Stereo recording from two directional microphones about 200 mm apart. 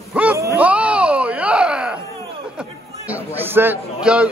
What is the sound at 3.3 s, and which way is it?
Speech, 10° right (ahead or behind).